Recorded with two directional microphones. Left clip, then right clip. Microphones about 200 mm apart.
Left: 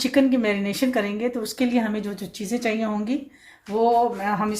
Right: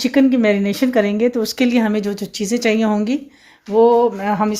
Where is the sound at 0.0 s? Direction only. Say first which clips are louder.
Right 5 dB; 35° right (ahead or behind).